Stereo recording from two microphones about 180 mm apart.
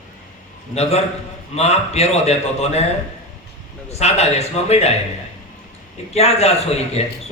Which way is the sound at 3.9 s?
35° left (ahead or behind).